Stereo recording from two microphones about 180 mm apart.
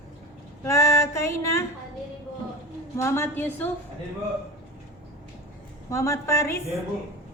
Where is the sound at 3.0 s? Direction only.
15° left (ahead or behind).